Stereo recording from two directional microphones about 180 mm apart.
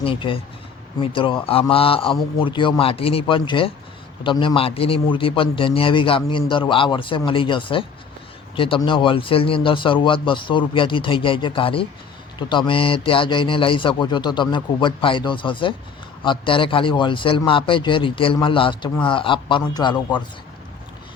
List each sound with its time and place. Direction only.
0.0 s a man's voice: 30° left (ahead or behind)